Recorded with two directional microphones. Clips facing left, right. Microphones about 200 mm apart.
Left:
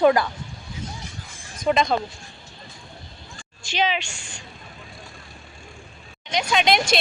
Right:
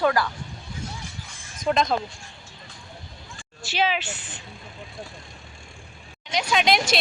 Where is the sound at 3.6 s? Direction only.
5° right (ahead or behind).